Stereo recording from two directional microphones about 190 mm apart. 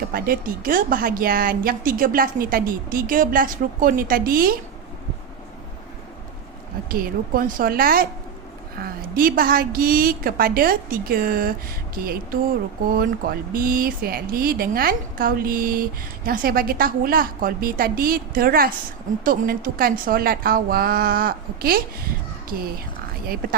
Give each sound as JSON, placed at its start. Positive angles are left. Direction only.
{"t": 0.1, "sound": "speech", "side_deg": -50}
{"t": 6.8, "sound": "speech", "side_deg": -50}